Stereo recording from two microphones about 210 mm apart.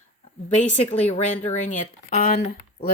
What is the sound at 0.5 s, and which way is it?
Speech, 30° left (ahead or behind).